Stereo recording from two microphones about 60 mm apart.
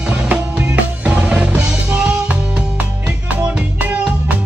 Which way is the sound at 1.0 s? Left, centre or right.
Centre.